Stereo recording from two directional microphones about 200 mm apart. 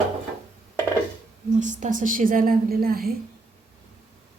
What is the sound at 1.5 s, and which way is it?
A woman's voice, 40° right (ahead or behind).